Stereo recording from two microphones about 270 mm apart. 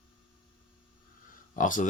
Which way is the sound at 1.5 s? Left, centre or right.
Left.